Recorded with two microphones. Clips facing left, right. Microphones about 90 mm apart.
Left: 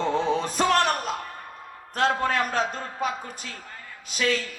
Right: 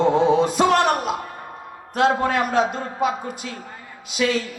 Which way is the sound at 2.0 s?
40° right (ahead or behind).